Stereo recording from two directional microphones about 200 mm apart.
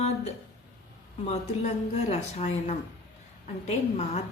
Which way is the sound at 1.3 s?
30° left (ahead or behind).